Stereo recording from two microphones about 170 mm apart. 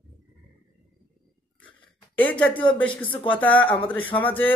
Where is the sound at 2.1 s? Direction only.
10° left (ahead or behind).